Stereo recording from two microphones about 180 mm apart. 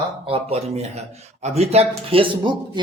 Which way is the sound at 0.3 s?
35° right (ahead or behind).